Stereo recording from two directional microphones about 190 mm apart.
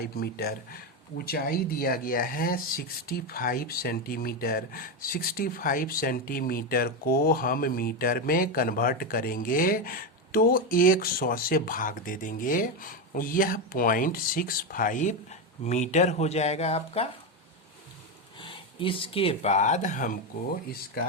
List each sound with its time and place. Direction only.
0.0 s speech: 55° left (ahead or behind); by 17.1 s 30° left (ahead or behind)
18.3 s speech: 25° left (ahead or behind); by 20.1 s 40° left (ahead or behind)